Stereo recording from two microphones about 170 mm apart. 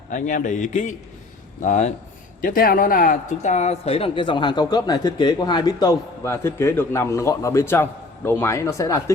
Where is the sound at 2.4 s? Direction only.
55° left (ahead or behind).